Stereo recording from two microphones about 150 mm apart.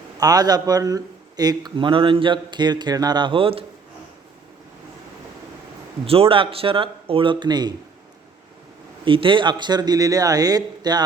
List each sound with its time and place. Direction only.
0.2 s speech: 25° right (ahead or behind)
6.1 s speech: 40° right (ahead or behind)
9.0 s speech: 35° right (ahead or behind)